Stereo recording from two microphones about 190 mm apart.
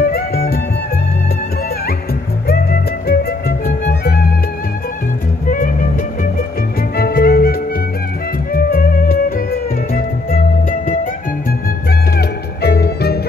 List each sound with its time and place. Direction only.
0.0 s music: 55° left (ahead or behind)
2.4 s music: 55° left (ahead or behind)
5.5 s music: 45° left (ahead or behind)
7.0 s music: 55° left (ahead or behind)
8.5 s music: 50° left (ahead or behind)
12.2 s music: 55° left (ahead or behind)